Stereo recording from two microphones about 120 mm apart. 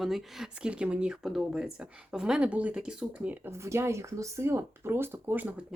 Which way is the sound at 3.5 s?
25° right (ahead or behind).